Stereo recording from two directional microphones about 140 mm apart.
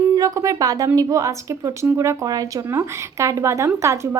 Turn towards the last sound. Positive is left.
turn(degrees=-20)  # may be behind; listen again after turning